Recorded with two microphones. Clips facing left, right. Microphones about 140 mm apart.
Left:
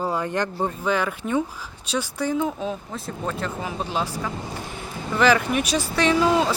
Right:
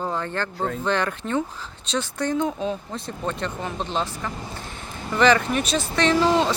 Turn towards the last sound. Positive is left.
turn(degrees=5)  # may be behind; listen again after turning